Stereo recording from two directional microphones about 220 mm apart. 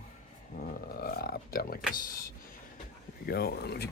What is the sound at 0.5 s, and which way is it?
Speech, 45° left (ahead or behind).